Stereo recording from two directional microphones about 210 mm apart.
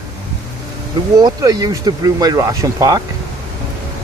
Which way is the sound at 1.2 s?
20° right (ahead or behind).